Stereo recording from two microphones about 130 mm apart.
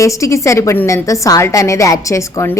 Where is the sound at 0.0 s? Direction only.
25° left (ahead or behind).